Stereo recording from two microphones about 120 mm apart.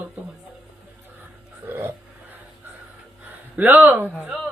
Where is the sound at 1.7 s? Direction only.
20° right (ahead or behind).